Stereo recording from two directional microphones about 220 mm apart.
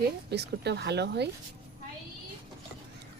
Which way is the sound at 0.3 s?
50° right (ahead or behind).